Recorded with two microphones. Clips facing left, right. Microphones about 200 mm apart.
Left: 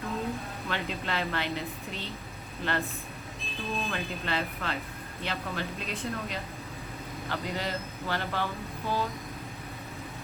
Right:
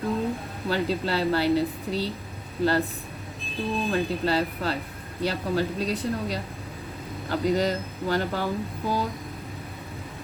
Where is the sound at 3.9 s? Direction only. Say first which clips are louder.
Right 8 dB; 35° right (ahead or behind).